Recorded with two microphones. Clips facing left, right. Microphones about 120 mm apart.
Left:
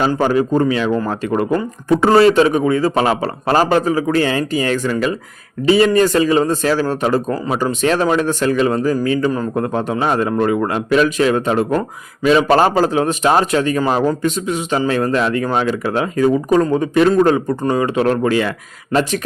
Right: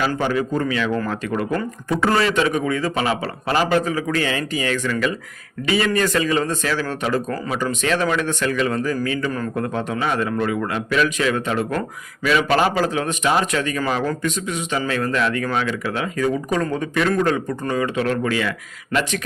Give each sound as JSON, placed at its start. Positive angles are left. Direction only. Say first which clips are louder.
{"t": 0.2, "sound": "a man's voice", "louder": "left 6 dB", "side_deg": 35}